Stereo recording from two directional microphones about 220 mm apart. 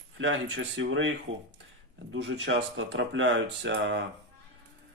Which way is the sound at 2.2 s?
55° right (ahead or behind).